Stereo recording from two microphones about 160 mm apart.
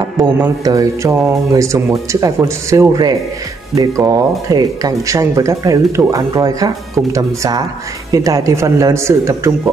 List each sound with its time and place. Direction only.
0.7 s speech: 20° right (ahead or behind)